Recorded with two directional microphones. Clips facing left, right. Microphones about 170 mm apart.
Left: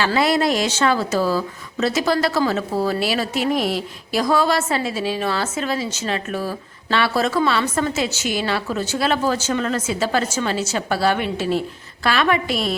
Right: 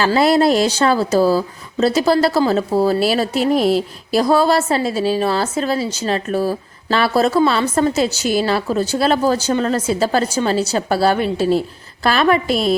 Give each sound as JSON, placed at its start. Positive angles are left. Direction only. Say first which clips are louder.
{"t": 0.0, "sound": "speech", "louder": "right 5 dB", "side_deg": -35}